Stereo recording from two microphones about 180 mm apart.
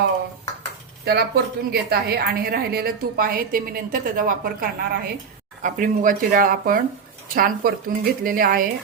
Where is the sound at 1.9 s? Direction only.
60° right (ahead or behind).